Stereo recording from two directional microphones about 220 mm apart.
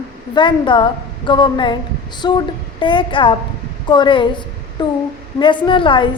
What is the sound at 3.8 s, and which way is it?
A woman's voice, 20° left (ahead or behind).